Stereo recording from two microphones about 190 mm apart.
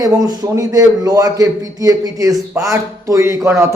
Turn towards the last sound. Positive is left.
turn(degrees=-15)  # may be behind; listen again after turning